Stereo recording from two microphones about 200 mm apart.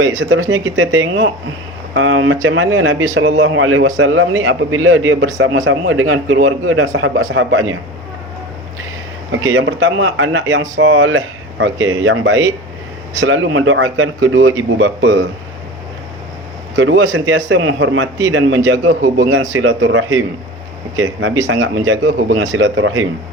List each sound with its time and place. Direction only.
0.2 s a man's voice: 80° right
0.5 s a man's voice: 65° right (ahead or behind)
4.4 s a man's voice: 85° right
9.4 s a man's voice: 70° right (ahead or behind)
16.7 s a man's voice: 70° right (ahead or behind)